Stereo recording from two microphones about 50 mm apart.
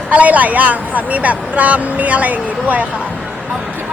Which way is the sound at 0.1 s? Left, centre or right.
Right.